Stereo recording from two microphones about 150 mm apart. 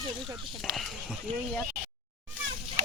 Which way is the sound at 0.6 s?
Centre (ahead or behind).